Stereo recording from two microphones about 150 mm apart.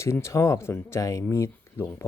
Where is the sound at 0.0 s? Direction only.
20° left (ahead or behind).